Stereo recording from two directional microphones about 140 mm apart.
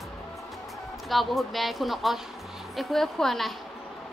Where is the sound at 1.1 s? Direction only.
Centre (ahead or behind).